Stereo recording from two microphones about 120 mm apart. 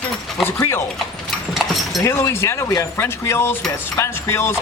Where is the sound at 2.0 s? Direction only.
20° left (ahead or behind).